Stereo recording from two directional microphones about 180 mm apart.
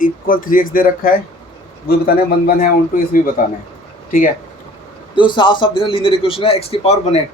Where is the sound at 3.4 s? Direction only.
45° left (ahead or behind).